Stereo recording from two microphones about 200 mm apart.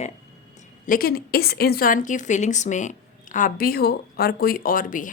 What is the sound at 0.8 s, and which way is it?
A woman's voice, 45° left (ahead or behind).